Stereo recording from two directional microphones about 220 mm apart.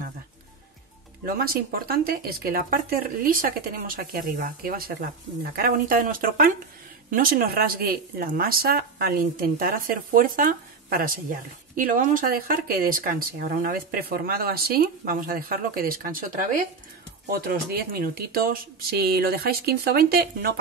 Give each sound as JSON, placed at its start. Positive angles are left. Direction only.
{"t": 1.2, "sound": "speech", "side_deg": -40}
{"t": 17.3, "sound": "speech", "side_deg": -40}